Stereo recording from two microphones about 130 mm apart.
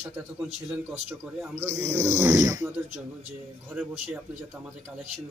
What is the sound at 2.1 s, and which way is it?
Speech, 25° right (ahead or behind).